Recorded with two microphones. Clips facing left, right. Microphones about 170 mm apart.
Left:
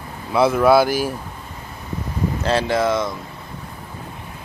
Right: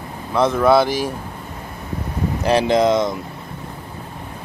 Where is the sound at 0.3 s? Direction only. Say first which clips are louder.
Left 1 dB; 5° left (ahead or behind).